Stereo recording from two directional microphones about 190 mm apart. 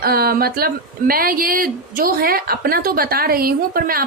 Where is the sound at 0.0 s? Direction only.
55° right (ahead or behind).